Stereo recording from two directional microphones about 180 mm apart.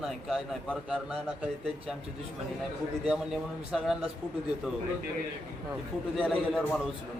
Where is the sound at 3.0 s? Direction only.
5° right (ahead or behind).